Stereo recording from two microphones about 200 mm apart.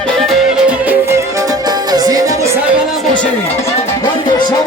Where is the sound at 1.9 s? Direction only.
20° right (ahead or behind).